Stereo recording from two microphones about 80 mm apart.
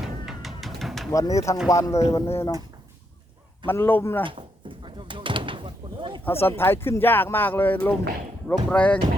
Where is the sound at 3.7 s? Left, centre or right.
Left.